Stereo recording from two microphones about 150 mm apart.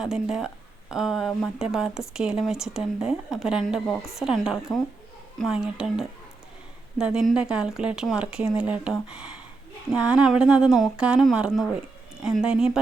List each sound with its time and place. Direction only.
0.0 s speech: 5° right (ahead or behind)